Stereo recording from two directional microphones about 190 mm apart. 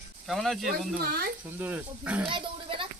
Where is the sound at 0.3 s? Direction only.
Centre (ahead or behind).